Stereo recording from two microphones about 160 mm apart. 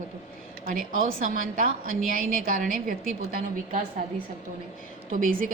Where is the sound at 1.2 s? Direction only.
55° right (ahead or behind).